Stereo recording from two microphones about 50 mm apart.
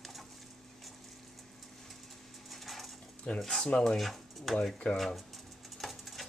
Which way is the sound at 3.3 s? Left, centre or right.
Left.